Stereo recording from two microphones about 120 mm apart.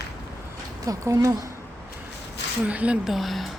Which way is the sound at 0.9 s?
30° right (ahead or behind).